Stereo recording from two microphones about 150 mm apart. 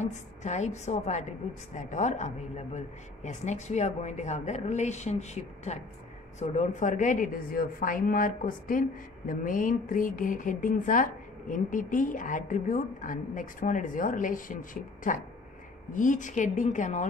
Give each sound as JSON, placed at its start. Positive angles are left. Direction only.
{"t": 0.0, "sound": "speech", "side_deg": 50}